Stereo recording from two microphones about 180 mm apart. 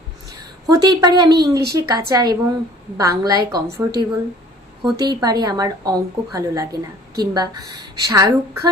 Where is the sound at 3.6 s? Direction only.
60° right (ahead or behind).